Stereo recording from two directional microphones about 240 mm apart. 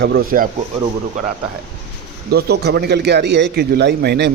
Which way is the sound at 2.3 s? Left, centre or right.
Right.